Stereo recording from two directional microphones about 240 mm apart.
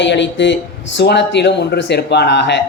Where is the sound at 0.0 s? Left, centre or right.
Left.